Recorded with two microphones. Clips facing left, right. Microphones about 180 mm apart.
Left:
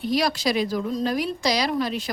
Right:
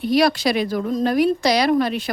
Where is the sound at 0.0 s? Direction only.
65° right (ahead or behind).